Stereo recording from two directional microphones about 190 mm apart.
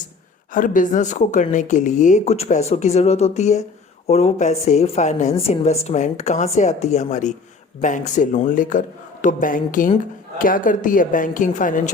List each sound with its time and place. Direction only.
0.5 s a woman's voice: 45° left (ahead or behind)